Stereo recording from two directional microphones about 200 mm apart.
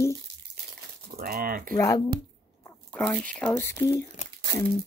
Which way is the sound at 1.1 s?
50° right (ahead or behind).